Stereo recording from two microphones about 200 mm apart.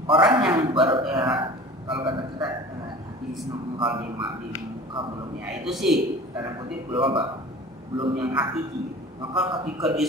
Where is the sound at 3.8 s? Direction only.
25° right (ahead or behind).